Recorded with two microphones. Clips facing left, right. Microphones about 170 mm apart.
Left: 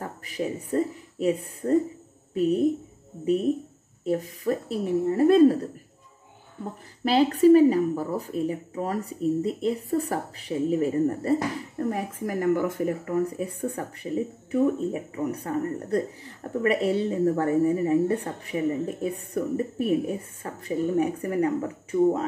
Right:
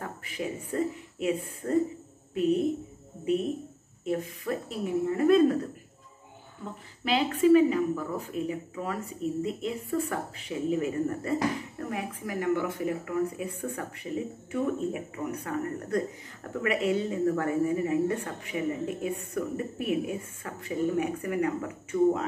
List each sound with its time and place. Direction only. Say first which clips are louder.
0.0 s speech: left 4 dB; 35° left (ahead or behind)
4.0 s speech: left 4 dB; 35° left (ahead or behind)